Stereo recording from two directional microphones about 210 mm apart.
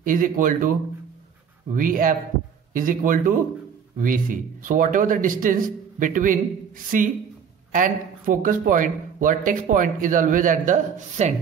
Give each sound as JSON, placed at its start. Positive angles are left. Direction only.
{"t": 0.0, "sound": "speech", "side_deg": -40}